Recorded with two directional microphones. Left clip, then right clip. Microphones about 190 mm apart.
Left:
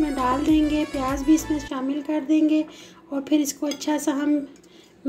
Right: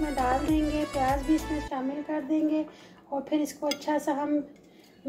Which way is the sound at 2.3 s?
50° left (ahead or behind).